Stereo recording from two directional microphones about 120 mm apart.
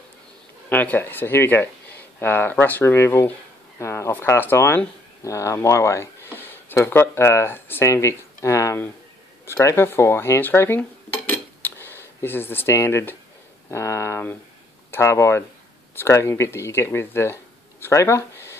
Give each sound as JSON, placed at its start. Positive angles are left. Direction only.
{"t": 0.7, "sound": "speech", "side_deg": 15}
{"t": 13.7, "sound": "a sound", "side_deg": 25}
{"t": 14.9, "sound": "speech", "side_deg": 25}